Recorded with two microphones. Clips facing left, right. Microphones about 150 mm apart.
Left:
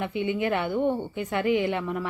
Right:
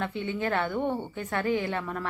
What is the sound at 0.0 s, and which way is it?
A woman's voice, 15° left (ahead or behind).